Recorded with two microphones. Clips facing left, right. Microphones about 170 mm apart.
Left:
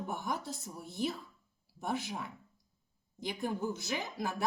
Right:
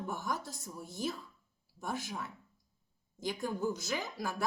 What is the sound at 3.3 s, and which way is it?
Speech, 20° left (ahead or behind).